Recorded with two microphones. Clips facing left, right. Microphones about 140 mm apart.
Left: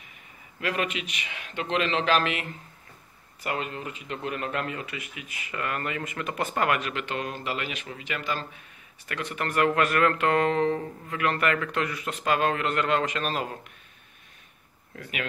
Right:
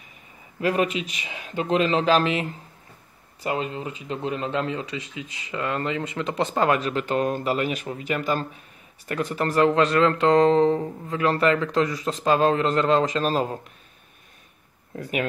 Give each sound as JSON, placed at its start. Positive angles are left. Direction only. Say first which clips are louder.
{"t": 0.6, "sound": "a man's voice", "louder": "right 6 dB", "side_deg": -35}
{"t": 3.4, "sound": "speech", "louder": "right 4 dB", "side_deg": -25}
{"t": 15.0, "sound": "a man's voice", "louder": "right 8 dB", "side_deg": -40}